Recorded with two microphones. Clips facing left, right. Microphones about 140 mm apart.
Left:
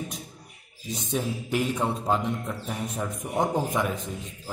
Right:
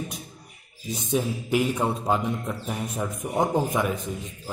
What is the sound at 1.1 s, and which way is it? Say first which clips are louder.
A man's voice: right 4 dB; 10° right (ahead or behind).